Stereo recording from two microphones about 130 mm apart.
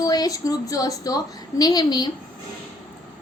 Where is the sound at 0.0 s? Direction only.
30° left (ahead or behind).